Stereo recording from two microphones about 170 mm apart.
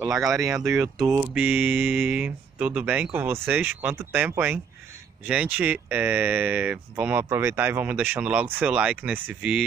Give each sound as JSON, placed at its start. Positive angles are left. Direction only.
{"t": 0.1, "sound": "speech", "side_deg": 0}
{"t": 0.9, "sound": "speech", "side_deg": -15}